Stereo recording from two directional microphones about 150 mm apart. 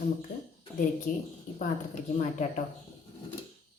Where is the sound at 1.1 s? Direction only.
65° left (ahead or behind).